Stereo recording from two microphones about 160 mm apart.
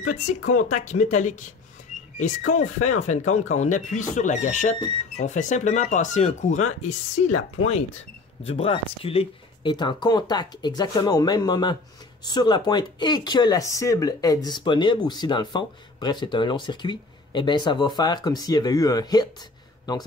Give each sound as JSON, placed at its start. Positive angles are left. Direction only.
{"t": 0.1, "sound": "speech", "side_deg": 50}
{"t": 8.5, "sound": "speech", "side_deg": 35}